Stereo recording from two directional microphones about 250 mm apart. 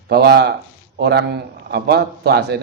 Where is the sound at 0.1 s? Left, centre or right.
Right.